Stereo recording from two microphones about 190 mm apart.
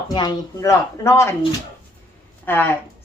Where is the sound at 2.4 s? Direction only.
10° left (ahead or behind).